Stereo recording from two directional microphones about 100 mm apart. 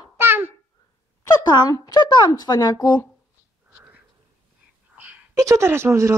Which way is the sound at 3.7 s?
15° right (ahead or behind).